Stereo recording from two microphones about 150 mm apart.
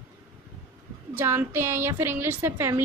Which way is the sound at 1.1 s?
15° right (ahead or behind).